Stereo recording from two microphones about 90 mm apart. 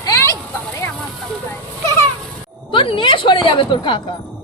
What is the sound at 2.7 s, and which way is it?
Speech, 65° left (ahead or behind).